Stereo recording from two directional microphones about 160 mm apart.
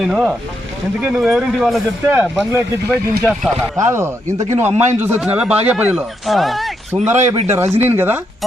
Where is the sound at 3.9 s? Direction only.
15° right (ahead or behind); by 7.0 s centre (ahead or behind).